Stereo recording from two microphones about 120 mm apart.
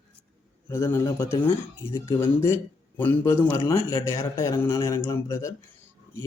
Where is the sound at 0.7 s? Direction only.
20° left (ahead or behind).